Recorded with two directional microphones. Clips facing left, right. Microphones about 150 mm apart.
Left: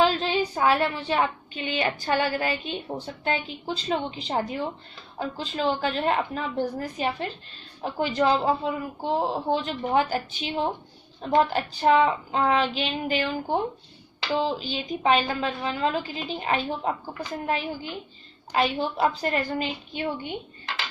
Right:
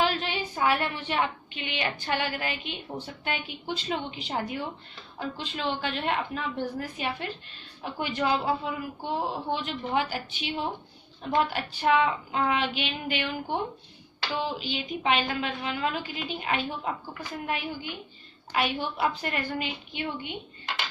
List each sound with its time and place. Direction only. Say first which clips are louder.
0.0 s a woman's voice: left 5 dB; 35° left (ahead or behind)